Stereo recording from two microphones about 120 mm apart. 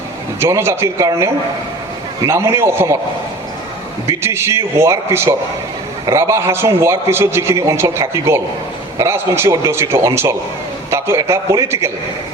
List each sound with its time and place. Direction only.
0.3 s a man's voice: 20° right (ahead or behind)
4.0 s a man's voice: 25° right (ahead or behind)